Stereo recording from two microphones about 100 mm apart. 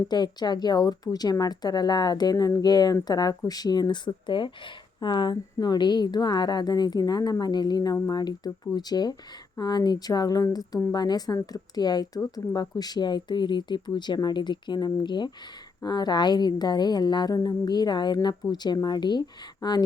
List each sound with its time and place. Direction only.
0.1 s a woman's voice: 45° left (ahead or behind)